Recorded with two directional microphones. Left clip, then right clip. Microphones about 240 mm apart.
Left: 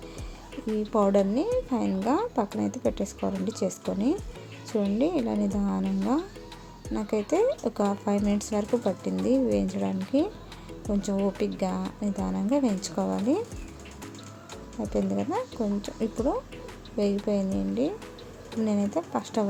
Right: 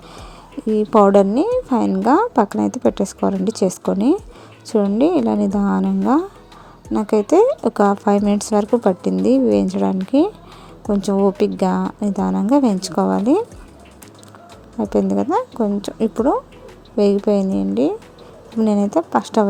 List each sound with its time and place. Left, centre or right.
0.6 s a sound: right
0.9 s speech: right
14.8 s speech: right